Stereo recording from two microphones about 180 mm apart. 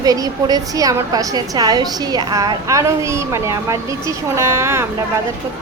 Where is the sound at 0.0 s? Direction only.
20° right (ahead or behind).